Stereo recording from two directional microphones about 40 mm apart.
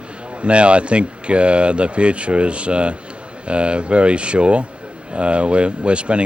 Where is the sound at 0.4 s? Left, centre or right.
Right.